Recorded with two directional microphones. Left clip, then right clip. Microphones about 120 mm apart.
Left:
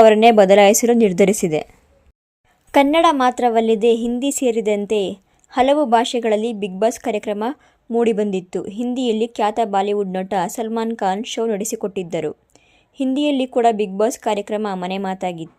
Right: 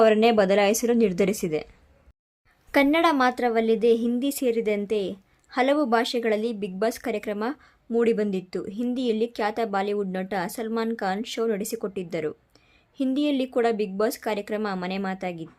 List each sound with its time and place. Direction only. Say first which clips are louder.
0.0 s a woman's voice: left 8 dB; 35° left (ahead or behind)
2.7 s a woman's voice: left 7 dB; 25° left (ahead or behind)